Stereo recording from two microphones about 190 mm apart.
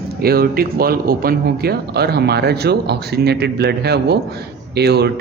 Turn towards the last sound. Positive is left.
turn(degrees=-60)  # may be behind; listen again after turning